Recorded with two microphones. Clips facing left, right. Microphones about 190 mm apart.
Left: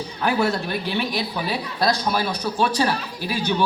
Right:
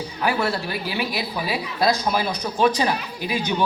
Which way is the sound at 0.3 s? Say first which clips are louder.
Left 2 dB; 5° right (ahead or behind).